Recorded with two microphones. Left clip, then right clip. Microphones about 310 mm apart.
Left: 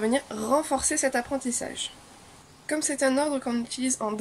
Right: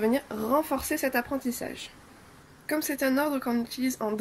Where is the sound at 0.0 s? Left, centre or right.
Left.